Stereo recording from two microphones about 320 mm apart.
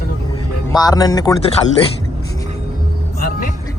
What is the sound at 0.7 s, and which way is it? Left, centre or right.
Speech, centre.